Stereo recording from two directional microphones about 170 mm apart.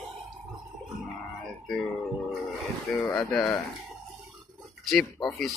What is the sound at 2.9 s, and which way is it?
Speech, 5° left (ahead or behind).